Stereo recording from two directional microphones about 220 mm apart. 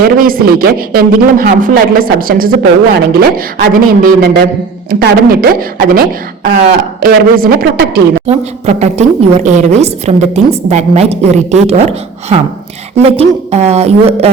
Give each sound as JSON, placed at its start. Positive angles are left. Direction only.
{"t": 0.2, "sound": "a man's voice", "side_deg": -40}
{"t": 8.3, "sound": "a woman's voice", "side_deg": -30}